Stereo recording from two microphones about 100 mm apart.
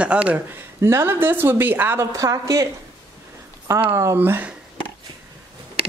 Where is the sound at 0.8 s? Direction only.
25° right (ahead or behind).